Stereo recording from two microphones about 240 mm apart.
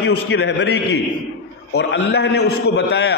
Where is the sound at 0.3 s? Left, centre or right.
Left.